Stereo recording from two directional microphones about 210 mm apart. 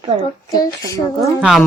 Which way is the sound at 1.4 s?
Centre (ahead or behind).